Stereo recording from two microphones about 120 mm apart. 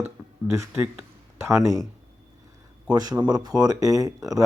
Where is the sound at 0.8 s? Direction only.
20° right (ahead or behind).